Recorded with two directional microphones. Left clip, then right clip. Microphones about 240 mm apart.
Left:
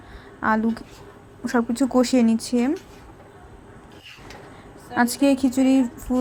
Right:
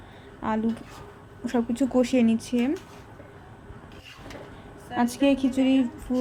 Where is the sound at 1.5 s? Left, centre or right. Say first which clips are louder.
Left 4 dB; centre.